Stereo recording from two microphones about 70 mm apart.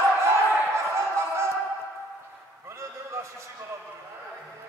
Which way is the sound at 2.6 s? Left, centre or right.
Right.